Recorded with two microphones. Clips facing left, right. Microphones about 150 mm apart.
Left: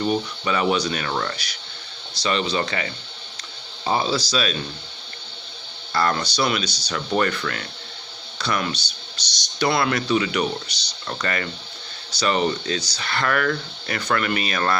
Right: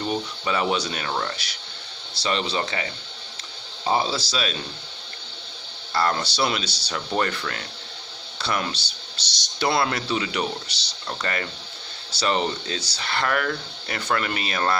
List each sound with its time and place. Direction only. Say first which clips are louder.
0.4 s speech: left 2 dB; 25° right (ahead or behind)
2.1 s speech: left 2 dB; 25° right (ahead or behind)
3.9 s speech: left 2 dB; 25° right (ahead or behind)
5.9 s speech: left 1 dB; 25° right (ahead or behind)